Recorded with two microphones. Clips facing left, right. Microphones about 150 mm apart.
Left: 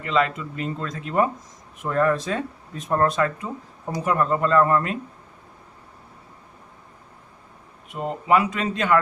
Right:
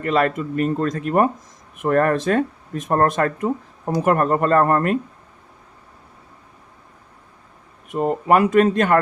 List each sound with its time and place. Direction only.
0.0 s speech: 50° right (ahead or behind)
7.9 s speech: 50° right (ahead or behind)